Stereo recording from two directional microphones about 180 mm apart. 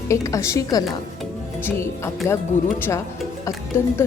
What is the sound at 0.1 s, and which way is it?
Speech, 15° left (ahead or behind).